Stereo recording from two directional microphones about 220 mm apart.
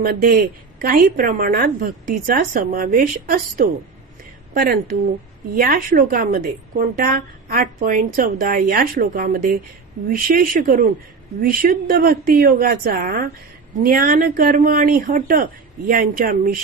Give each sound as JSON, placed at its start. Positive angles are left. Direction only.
{"t": 0.0, "sound": "a woman's voice", "side_deg": -45}